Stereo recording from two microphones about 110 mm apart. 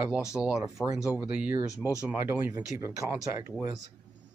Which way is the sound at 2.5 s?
30° right (ahead or behind).